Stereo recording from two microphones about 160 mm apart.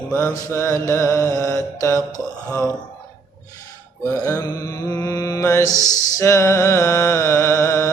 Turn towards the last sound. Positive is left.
turn(degrees=20)  # may be behind; listen again after turning